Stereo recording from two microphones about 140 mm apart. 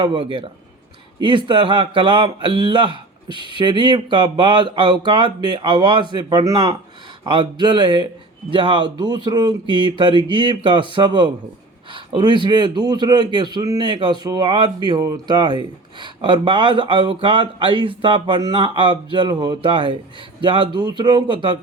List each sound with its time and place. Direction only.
0.0 s speech: 35° right (ahead or behind)